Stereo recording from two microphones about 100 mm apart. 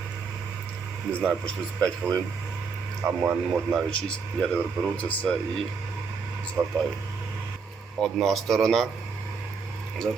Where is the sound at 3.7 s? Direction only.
10° left (ahead or behind).